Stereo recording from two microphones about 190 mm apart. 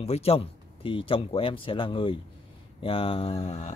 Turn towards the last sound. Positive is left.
turn(degrees=35)  # may be behind; listen again after turning